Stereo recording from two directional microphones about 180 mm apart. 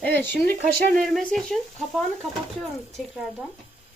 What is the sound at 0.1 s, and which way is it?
Speech, 60° right (ahead or behind).